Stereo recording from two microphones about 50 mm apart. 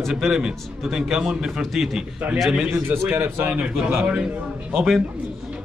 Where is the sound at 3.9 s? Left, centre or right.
Centre.